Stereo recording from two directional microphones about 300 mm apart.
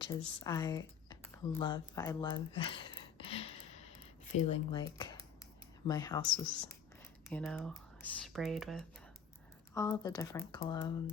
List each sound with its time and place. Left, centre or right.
0.2 s speech: centre
7.3 s speech: centre
9.7 s speech: centre